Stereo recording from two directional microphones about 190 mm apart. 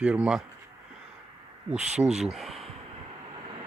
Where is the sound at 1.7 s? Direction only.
5° right (ahead or behind).